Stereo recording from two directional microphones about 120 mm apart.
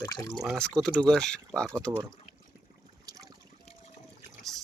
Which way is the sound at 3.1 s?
30° right (ahead or behind).